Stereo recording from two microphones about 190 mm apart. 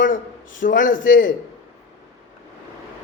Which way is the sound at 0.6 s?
45° left (ahead or behind).